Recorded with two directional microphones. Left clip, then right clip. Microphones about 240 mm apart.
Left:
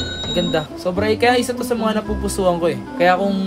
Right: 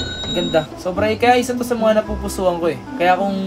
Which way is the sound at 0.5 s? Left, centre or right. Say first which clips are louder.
Right 2 dB; centre.